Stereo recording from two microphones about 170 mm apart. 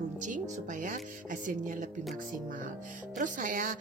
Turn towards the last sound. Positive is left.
turn(degrees=-50)  # may be behind; listen again after turning